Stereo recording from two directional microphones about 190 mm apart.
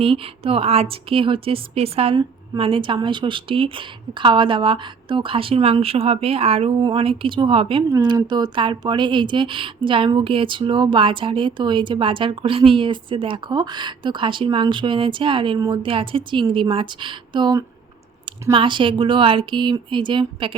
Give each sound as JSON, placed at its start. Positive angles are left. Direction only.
{"t": 0.0, "sound": "speech", "side_deg": -30}